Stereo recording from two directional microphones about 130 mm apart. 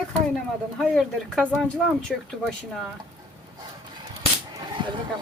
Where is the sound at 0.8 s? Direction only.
5° left (ahead or behind).